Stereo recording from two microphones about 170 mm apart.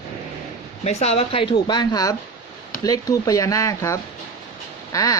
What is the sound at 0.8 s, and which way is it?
Speech, 40° left (ahead or behind).